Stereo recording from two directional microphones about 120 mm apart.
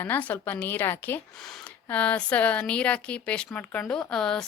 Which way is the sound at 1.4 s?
5° left (ahead or behind).